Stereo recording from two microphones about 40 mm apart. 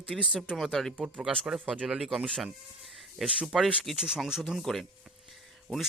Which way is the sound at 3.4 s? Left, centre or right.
Centre.